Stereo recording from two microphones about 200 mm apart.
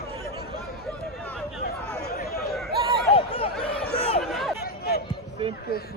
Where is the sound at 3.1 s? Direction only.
30° left (ahead or behind).